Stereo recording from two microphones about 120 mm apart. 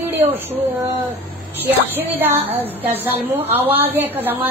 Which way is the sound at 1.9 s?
15° right (ahead or behind).